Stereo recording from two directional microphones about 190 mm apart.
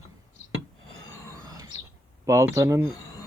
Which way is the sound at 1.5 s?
20° right (ahead or behind).